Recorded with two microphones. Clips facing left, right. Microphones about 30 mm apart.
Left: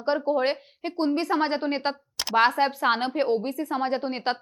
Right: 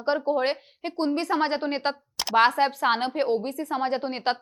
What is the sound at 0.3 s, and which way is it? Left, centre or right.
A woman's voice, centre.